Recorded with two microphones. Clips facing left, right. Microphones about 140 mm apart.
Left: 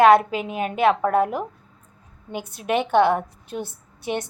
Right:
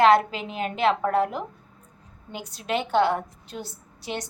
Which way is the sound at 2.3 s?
25° left (ahead or behind).